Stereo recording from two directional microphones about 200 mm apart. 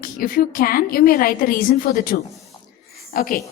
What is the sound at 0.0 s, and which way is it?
A woman's voice, 45° left (ahead or behind).